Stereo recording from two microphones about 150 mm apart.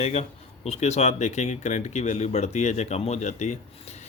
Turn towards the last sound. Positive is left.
turn(degrees=50)  # may be behind; listen again after turning